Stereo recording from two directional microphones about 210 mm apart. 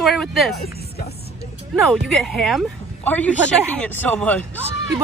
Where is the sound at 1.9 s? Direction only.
Centre (ahead or behind).